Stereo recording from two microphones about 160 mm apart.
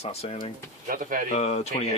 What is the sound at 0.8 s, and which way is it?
Speech, 60° right (ahead or behind).